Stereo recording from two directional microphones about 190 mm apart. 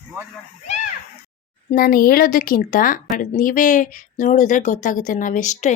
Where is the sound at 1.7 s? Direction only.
50° left (ahead or behind).